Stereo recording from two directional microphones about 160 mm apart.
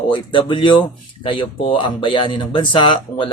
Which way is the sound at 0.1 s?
30° left (ahead or behind).